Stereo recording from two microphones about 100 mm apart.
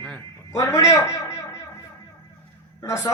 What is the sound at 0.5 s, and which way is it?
A man's voice, 30° left (ahead or behind).